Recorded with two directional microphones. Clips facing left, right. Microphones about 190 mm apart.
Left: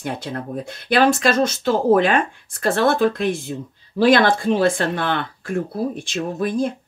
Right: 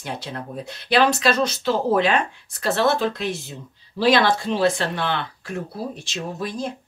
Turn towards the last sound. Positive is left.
turn(degrees=55)  # may be behind; listen again after turning